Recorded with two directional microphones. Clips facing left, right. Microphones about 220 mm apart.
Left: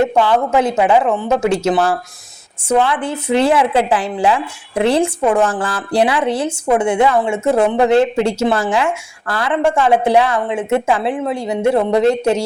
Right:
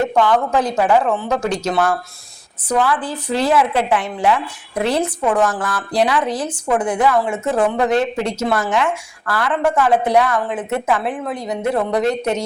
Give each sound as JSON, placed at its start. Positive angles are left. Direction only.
{"t": 0.3, "sound": "speech", "side_deg": 25}